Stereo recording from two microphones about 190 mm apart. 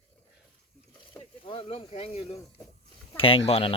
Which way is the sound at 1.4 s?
30° left (ahead or behind).